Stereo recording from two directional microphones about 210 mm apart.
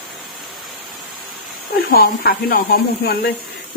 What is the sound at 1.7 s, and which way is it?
Speech, 45° left (ahead or behind).